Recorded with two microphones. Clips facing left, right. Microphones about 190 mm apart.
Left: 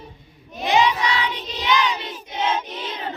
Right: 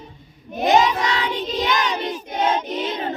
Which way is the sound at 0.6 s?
45° right (ahead or behind).